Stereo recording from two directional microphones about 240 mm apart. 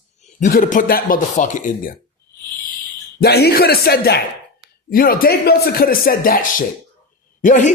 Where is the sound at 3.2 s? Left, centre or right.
Left.